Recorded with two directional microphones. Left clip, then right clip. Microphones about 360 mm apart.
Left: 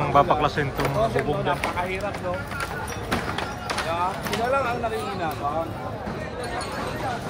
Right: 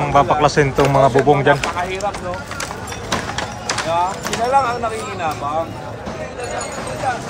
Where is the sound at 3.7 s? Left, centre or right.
Right.